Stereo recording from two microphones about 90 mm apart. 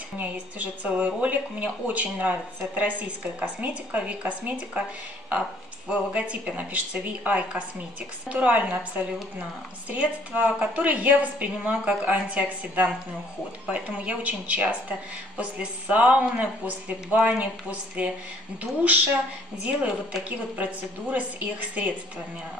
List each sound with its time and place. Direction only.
0.2 s a woman's voice: 15° right (ahead or behind)
5.9 s a woman's voice: 15° right (ahead or behind)
21.8 s a woman's voice: 15° right (ahead or behind)